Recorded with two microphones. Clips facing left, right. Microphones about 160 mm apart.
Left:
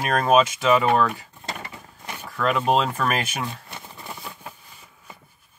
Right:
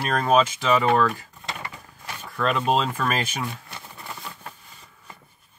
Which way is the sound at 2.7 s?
5° left (ahead or behind).